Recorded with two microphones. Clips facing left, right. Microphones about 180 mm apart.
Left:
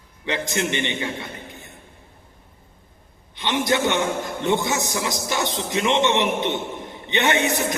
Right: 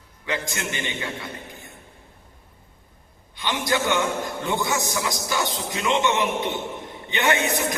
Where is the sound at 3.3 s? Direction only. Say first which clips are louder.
Left 3 dB; 25° left (ahead or behind).